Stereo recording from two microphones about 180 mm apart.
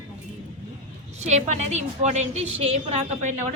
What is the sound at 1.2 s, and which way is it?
A woman's voice, 40° right (ahead or behind).